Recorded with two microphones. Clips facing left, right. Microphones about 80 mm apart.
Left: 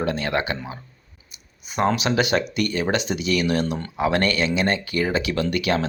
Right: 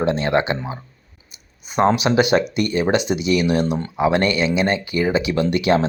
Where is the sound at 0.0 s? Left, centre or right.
Right.